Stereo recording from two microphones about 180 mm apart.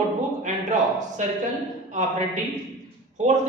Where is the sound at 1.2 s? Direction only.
45° right (ahead or behind).